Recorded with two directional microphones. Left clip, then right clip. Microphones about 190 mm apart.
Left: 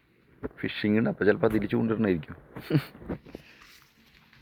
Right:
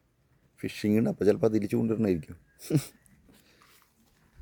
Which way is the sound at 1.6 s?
20° right (ahead or behind).